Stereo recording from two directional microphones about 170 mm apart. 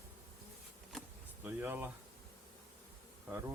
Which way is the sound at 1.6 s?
10° right (ahead or behind).